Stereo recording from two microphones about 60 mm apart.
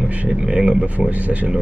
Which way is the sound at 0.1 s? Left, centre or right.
Right.